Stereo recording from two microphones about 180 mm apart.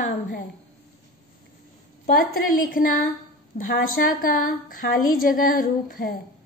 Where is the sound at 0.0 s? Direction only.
45° left (ahead or behind).